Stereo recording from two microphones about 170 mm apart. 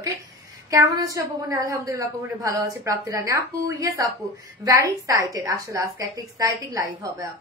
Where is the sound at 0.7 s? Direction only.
20° right (ahead or behind).